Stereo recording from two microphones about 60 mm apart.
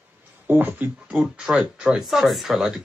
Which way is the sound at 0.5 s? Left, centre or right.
Right.